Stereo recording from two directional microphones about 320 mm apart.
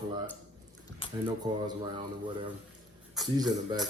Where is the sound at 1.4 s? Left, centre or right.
Centre.